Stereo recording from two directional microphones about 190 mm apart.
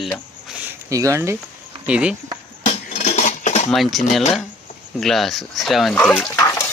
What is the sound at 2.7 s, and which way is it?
Cutlery, 35° left (ahead or behind).